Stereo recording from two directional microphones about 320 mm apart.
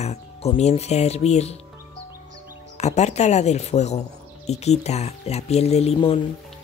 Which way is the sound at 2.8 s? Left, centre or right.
Left.